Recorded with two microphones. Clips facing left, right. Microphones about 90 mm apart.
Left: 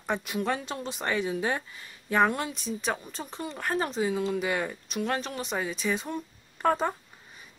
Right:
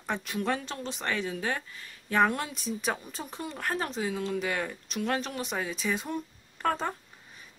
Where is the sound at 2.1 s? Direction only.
5° left (ahead or behind).